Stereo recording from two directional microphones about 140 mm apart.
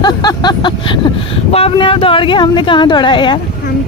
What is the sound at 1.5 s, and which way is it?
A woman's voice, 45° left (ahead or behind).